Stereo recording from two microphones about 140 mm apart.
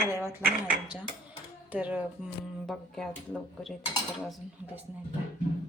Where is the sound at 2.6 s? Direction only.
5° left (ahead or behind).